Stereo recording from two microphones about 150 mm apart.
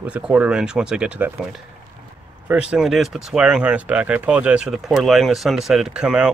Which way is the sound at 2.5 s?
5° right (ahead or behind).